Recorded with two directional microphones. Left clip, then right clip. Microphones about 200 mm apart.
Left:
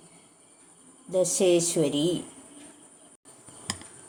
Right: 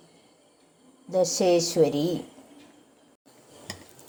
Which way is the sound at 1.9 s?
35° right (ahead or behind).